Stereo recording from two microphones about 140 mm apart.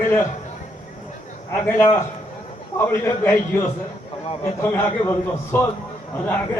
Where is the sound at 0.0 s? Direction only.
15° left (ahead or behind).